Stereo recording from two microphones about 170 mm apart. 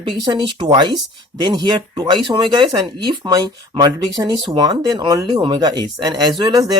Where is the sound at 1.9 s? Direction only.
25° right (ahead or behind).